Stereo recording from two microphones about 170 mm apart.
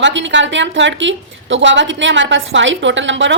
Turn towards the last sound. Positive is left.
turn(degrees=-90)